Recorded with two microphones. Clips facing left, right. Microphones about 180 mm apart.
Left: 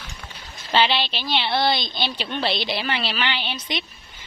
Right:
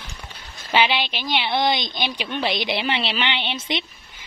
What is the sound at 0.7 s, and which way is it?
A woman's voice, 10° right (ahead or behind).